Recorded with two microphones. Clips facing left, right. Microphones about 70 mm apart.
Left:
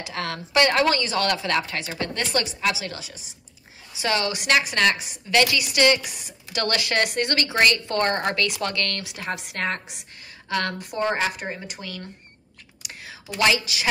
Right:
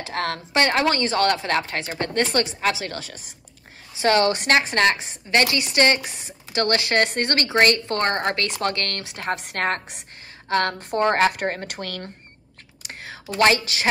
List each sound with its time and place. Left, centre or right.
0.0 s speech: right
12.8 s whispering: right